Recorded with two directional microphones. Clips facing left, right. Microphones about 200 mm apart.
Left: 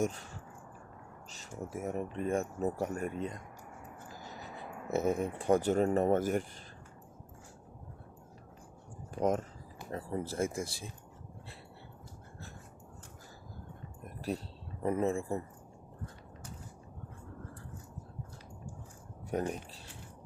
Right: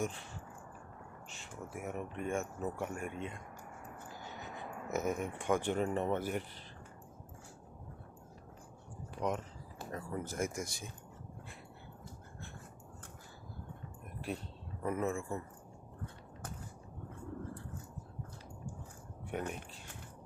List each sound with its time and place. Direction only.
0.0 s speech: 40° left (ahead or behind)
1.3 s speech: 40° left (ahead or behind)
4.3 s a sound: 35° left (ahead or behind)
4.9 s speech: 30° left (ahead or behind)
9.9 s speech: 30° left (ahead or behind)
14.2 s a sound: 35° left (ahead or behind)
19.3 s speech: 35° left (ahead or behind)